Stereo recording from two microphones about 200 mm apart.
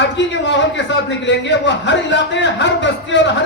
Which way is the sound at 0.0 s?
60° left (ahead or behind).